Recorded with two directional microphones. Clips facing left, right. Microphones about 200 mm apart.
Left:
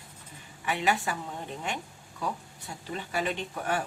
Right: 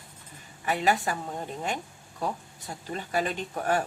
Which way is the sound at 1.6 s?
45° right (ahead or behind).